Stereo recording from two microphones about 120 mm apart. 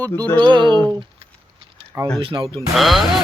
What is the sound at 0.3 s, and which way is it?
Speech, 40° right (ahead or behind).